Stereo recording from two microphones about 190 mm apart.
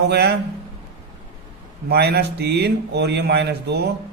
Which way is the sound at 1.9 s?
60° right (ahead or behind).